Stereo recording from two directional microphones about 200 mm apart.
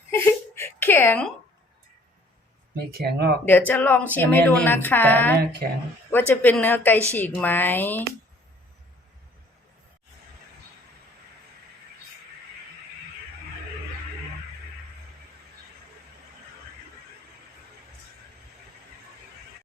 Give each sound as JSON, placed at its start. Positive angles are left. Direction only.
{"t": 0.1, "sound": "a sound", "side_deg": 15}
{"t": 3.0, "sound": "speech", "side_deg": -55}
{"t": 3.4, "sound": "a woman's voice", "side_deg": 10}
{"t": 5.6, "sound": "speech", "side_deg": -45}
{"t": 6.1, "sound": "a woman's voice", "side_deg": 10}